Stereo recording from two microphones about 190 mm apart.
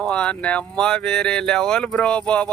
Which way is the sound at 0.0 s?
5° left (ahead or behind).